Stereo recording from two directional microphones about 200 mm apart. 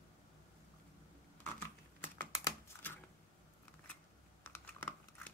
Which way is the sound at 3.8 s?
10° left (ahead or behind).